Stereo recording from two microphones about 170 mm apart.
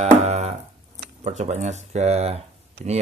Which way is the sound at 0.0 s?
40° right (ahead or behind).